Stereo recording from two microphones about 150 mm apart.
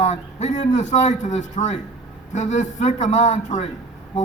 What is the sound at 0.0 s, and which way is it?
A man's voice, 50° left (ahead or behind).